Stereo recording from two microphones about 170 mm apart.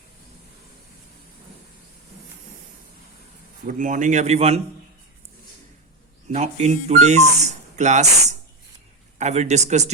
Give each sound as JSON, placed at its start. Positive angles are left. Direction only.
{"t": 3.7, "sound": "speech", "side_deg": -50}
{"t": 6.3, "sound": "speech", "side_deg": -40}